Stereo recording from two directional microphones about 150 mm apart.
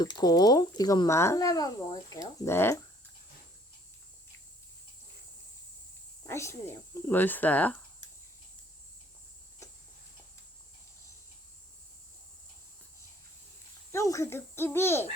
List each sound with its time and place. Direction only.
0.0 s speech: 30° left (ahead or behind)
6.2 s speech: 20° left (ahead or behind)
13.9 s speech: 20° left (ahead or behind)